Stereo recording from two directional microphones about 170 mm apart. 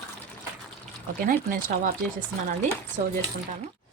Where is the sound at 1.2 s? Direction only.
55° right (ahead or behind).